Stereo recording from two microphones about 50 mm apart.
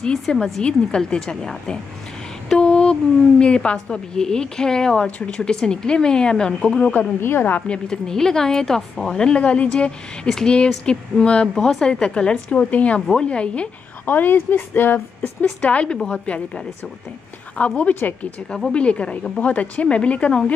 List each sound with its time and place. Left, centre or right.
0.0 s a woman's voice: centre
7.2 s a woman's voice: left
7.6 s a woman's voice: centre
9.2 s a woman's voice: left
14.0 s speech: left
15.6 s speech: left
17.6 s speech: left